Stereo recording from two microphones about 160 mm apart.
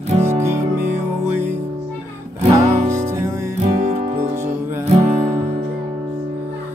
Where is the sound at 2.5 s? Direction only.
45° right (ahead or behind).